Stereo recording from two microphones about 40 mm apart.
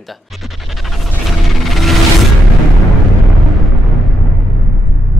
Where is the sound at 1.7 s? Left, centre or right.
Centre.